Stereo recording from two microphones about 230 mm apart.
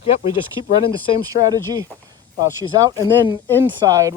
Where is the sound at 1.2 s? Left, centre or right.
Centre.